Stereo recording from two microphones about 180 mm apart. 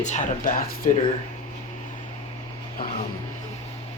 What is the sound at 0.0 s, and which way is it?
Speech, 40° left (ahead or behind).